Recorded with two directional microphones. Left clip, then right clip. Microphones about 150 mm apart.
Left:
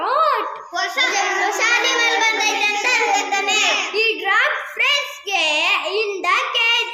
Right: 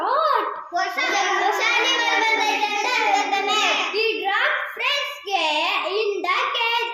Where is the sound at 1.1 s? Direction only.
25° left (ahead or behind).